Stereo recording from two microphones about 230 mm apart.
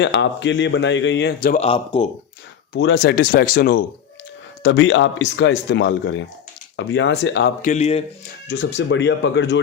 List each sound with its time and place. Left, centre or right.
0.0 s speech: left
1.6 s speech: left
2.7 s speech: left
7.6 s speech: left
8.4 s speech: left